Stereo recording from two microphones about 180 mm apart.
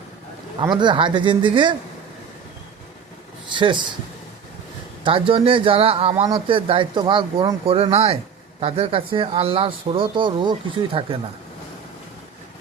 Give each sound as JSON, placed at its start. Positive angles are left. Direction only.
{"t": 0.6, "sound": "speech", "side_deg": -25}
{"t": 3.5, "sound": "speech", "side_deg": -25}
{"t": 5.0, "sound": "speech", "side_deg": -30}